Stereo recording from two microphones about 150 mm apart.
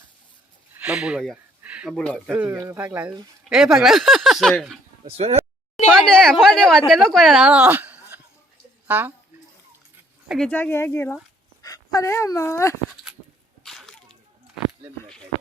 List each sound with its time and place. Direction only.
0.7 s speech: 10° right (ahead or behind)
1.6 s a sound: 10° right (ahead or behind)
1.9 s speech: 5° left (ahead or behind)
2.3 s speech: 10° right (ahead or behind)
5.0 s speech: 45° right (ahead or behind)
5.7 s speech: 5° left (ahead or behind); by 9.1 s 10° right (ahead or behind)
10.2 s speech: 5° left (ahead or behind)
13.6 s sneeze: centre (ahead or behind)